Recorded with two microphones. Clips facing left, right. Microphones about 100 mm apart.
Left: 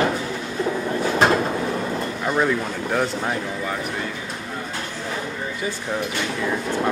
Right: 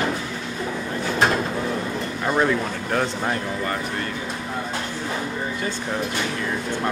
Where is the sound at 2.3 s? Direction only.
Centre (ahead or behind).